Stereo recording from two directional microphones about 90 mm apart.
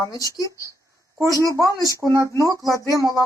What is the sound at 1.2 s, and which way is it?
Speech, 40° right (ahead or behind).